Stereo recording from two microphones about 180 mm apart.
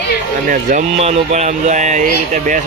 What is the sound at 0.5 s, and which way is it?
Speech, 45° right (ahead or behind).